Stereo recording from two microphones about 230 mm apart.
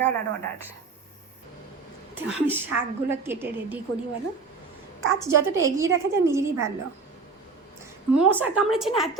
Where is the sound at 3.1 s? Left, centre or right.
Centre.